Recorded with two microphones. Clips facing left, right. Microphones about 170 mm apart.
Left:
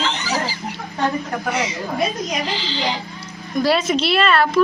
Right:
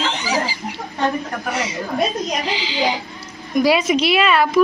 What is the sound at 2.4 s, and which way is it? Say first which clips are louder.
A woman's voice: right 3 dB; 5° right (ahead or behind).